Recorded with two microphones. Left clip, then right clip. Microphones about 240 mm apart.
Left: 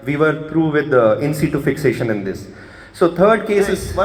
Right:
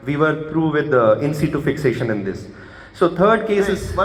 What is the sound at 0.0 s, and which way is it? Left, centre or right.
A man's voice, left.